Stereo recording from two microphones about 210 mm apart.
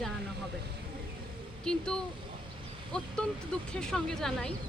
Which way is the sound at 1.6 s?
5° left (ahead or behind).